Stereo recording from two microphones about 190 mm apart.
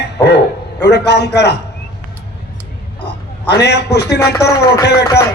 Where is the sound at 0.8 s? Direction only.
65° left (ahead or behind).